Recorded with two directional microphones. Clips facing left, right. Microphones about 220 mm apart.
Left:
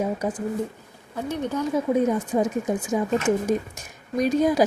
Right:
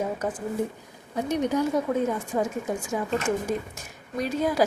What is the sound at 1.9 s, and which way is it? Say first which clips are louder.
A woman's voice: left 4 dB; 15° left (ahead or behind).